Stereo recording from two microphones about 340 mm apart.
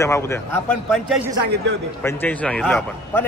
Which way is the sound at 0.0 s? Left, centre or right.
Centre.